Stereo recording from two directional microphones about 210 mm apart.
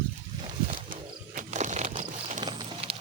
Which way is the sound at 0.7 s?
40° right (ahead or behind).